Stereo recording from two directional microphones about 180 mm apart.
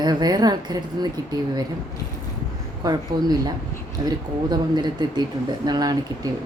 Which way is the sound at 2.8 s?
20° right (ahead or behind).